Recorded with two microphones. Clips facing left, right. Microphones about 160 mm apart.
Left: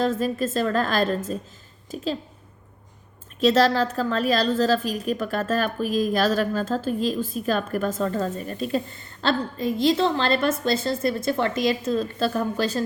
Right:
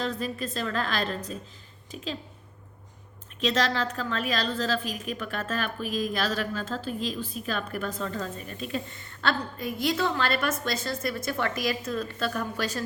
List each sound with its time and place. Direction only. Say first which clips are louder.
0.0 s a woman's voice: left 8 dB; 45° left (ahead or behind)
3.4 s a woman's voice: left 8 dB; 40° left (ahead or behind)